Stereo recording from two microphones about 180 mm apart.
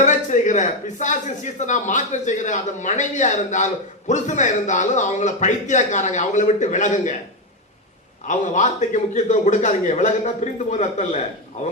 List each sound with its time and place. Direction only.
0.0 s a man's voice: 40° left (ahead or behind)
8.3 s a man's voice: 40° left (ahead or behind)